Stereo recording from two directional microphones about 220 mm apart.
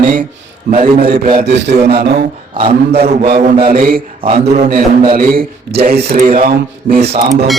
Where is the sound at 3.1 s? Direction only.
45° right (ahead or behind).